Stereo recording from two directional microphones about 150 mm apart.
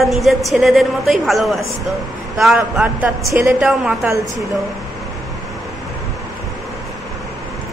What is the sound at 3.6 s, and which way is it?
Speech, 5° right (ahead or behind).